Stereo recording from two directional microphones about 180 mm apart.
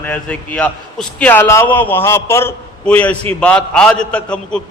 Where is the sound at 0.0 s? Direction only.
5° left (ahead or behind).